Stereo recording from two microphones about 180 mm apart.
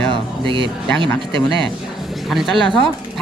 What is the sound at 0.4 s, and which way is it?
Speech, 25° right (ahead or behind).